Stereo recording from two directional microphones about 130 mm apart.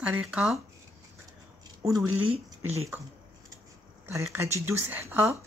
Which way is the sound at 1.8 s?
25° right (ahead or behind).